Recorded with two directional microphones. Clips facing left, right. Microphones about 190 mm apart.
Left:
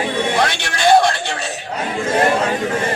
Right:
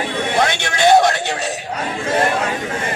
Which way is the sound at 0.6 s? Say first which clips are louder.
Right 1 dB; 45° right (ahead or behind).